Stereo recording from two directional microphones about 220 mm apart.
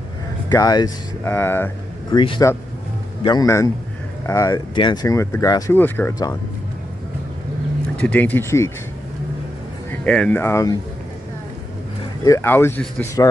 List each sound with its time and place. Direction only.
0.5 s speech: 15° left (ahead or behind)
2.1 s speech: 20° left (ahead or behind)
8.0 s speech: 5° left (ahead or behind)
10.0 s speech: 5° left (ahead or behind)
12.3 s speech: 10° left (ahead or behind)